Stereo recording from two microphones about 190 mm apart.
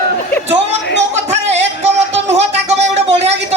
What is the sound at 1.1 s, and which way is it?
Music, 35° right (ahead or behind).